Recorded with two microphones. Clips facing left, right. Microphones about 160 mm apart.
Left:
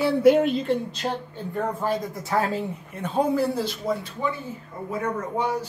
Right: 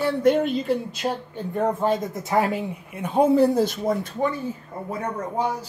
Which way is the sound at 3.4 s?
45° right (ahead or behind).